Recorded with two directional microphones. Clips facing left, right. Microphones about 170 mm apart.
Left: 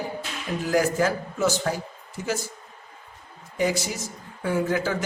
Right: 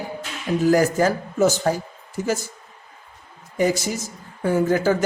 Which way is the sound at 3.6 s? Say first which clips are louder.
Right 4 dB; 45° right (ahead or behind).